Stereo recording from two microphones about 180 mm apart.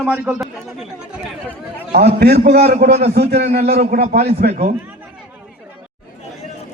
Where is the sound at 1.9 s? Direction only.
65° right (ahead or behind).